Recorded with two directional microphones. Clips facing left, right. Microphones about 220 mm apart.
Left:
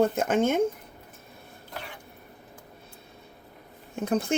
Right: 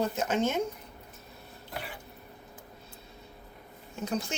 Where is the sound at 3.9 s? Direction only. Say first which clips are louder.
Left 7 dB; 55° left (ahead or behind).